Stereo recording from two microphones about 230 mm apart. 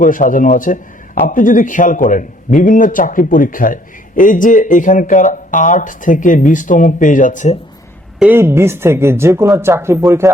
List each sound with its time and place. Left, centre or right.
0.0 s a man's voice: left
8.2 s speech: centre